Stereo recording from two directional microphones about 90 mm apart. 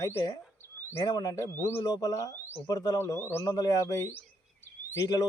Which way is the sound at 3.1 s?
30° left (ahead or behind).